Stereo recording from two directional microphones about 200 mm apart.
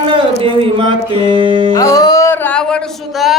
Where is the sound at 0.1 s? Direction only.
25° right (ahead or behind).